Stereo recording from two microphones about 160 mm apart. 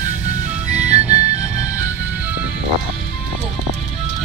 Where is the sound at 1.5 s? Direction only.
45° right (ahead or behind).